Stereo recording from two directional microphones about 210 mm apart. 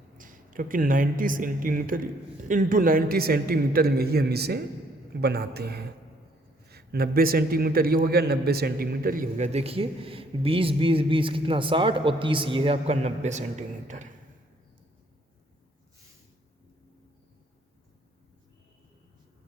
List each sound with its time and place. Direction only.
0.2 s a man's voice: 40° right (ahead or behind)